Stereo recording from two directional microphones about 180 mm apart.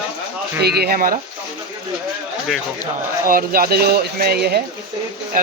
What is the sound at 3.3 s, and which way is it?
Speech, 55° right (ahead or behind).